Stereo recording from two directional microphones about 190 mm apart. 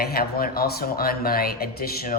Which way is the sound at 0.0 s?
50° left (ahead or behind).